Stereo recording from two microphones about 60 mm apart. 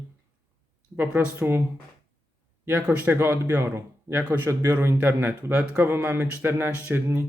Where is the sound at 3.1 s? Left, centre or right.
Right.